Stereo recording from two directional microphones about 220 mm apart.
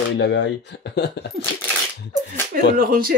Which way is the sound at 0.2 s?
55° left (ahead or behind).